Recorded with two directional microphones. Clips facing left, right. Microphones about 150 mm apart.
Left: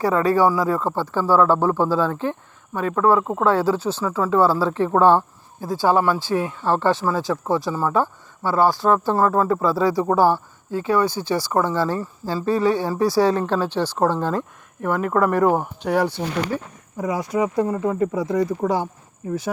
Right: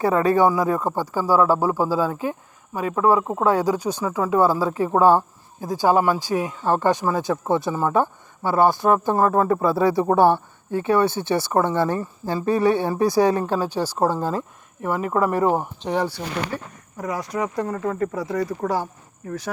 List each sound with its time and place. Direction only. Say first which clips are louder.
0.0 s speech: even; 20° right (ahead or behind); by 15.7 s 5° right (ahead or behind)
17.0 s speech: left 4 dB; 20° left (ahead or behind)